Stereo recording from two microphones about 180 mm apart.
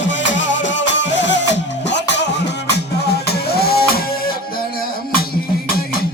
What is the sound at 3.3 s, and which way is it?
Music, 60° left (ahead or behind).